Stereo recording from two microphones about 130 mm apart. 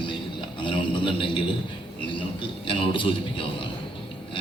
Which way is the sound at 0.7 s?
40° left (ahead or behind).